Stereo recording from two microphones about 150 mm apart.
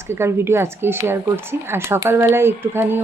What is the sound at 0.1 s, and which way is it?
Speech, 15° right (ahead or behind).